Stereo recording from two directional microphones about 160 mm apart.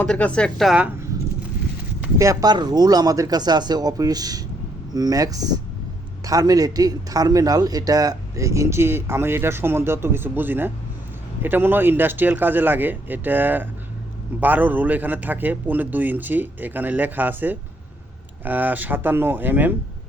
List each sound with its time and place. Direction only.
0.0 s a woman's voice: 10° left (ahead or behind)
2.1 s a man's voice: 20° right (ahead or behind)